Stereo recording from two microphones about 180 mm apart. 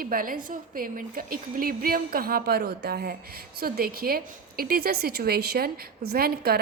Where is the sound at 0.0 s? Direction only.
50° right (ahead or behind).